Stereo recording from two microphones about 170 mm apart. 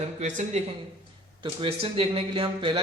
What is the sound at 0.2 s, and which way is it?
Speech, 45° right (ahead or behind).